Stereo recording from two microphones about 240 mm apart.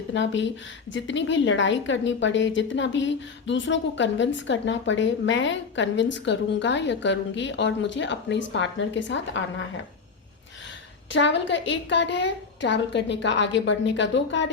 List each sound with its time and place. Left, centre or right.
0.1 s a woman's voice: left
11.1 s a woman's voice: left